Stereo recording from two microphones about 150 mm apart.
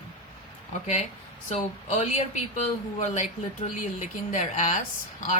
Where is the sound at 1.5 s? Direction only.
45° left (ahead or behind).